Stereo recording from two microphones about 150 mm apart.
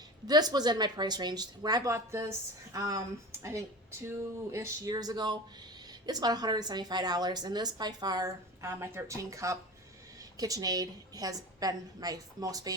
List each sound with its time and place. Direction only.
0.3 s a woman's voice: 25° right (ahead or behind)
4.0 s a woman's voice: 20° right (ahead or behind)